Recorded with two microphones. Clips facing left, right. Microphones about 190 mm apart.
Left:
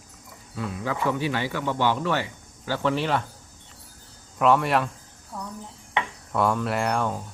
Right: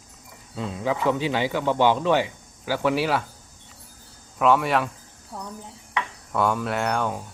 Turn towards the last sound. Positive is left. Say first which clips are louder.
# even
turn(degrees=0)  # may be behind; listen again after turning